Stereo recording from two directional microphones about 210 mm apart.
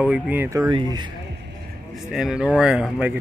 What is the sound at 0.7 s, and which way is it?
Speech, 20° right (ahead or behind).